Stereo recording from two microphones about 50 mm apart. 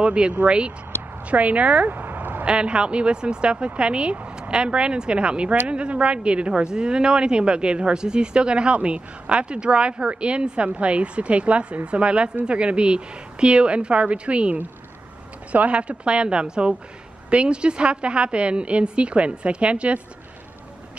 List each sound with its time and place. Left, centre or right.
0.0 s speech: right
2.4 s speech: right